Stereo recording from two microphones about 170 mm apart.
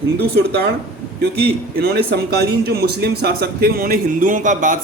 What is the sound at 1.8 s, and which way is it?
A man's voice, 70° right (ahead or behind).